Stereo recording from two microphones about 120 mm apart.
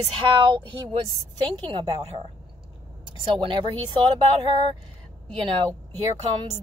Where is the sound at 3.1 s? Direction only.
45° right (ahead or behind).